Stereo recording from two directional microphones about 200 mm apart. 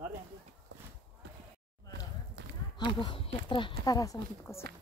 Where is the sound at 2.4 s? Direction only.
60° right (ahead or behind).